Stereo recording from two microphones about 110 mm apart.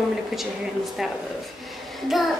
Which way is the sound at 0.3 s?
Centre (ahead or behind).